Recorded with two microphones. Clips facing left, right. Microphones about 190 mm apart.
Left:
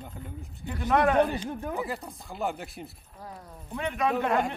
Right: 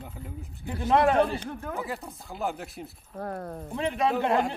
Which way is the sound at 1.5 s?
15° left (ahead or behind).